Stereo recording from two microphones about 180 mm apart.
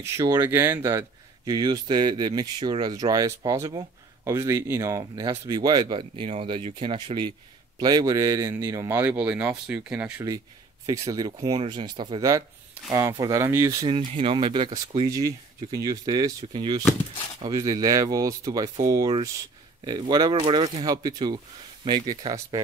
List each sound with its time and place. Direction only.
0.0 s speech: 15° right (ahead or behind)
10.9 s speech: 20° right (ahead or behind)